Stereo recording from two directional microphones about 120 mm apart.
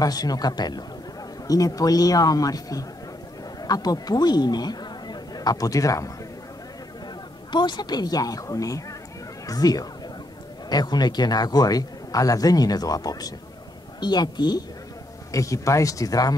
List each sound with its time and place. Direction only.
0.0 s a man's voice: 30° left (ahead or behind)
7.5 s a man's voice: 40° left (ahead or behind)